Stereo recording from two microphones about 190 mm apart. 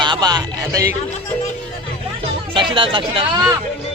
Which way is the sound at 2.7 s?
25° right (ahead or behind).